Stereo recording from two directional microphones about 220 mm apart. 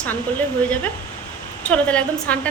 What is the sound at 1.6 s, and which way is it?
Speech, 5° left (ahead or behind).